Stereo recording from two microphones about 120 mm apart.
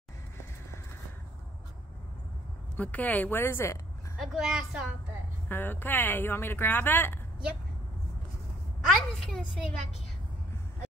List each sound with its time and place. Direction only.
2.8 s speech: 15° left (ahead or behind)
4.2 s a woman's voice: 5° right (ahead or behind)
5.5 s speech: 15° left (ahead or behind)
8.8 s a sound: 5° left (ahead or behind)